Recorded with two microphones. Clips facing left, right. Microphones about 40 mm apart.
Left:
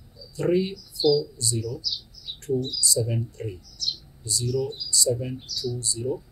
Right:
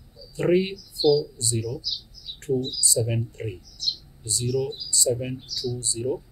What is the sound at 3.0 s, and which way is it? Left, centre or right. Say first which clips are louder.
Speech: right 1 dB; right.